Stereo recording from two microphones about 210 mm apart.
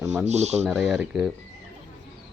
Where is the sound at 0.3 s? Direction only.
30° right (ahead or behind).